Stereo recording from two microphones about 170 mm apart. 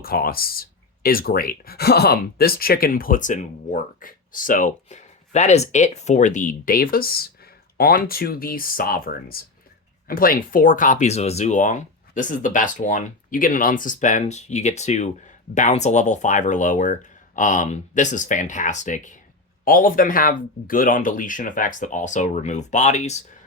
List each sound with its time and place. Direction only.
0.0 s speech: 60° left (ahead or behind); by 23.2 s 40° left (ahead or behind)